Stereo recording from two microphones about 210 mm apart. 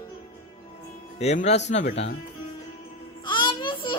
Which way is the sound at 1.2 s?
30° left (ahead or behind).